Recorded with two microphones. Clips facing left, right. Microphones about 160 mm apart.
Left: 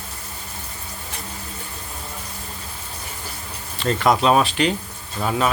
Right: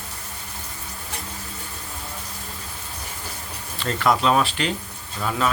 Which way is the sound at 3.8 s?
20° left (ahead or behind).